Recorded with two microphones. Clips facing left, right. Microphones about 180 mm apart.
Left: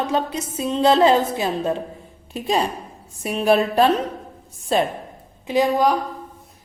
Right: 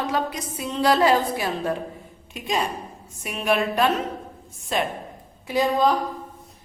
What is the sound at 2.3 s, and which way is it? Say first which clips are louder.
A woman's voice: left 4 dB; 35° left (ahead or behind).